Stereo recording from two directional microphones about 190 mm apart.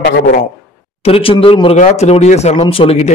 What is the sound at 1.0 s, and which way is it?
Speech, 30° left (ahead or behind).